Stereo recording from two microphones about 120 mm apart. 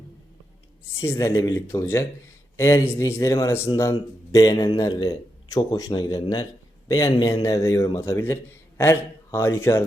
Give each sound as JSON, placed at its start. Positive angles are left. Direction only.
{"t": 0.9, "sound": "a man's voice", "side_deg": 25}